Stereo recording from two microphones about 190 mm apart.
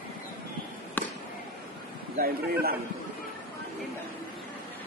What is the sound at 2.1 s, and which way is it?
Speech, 50° right (ahead or behind).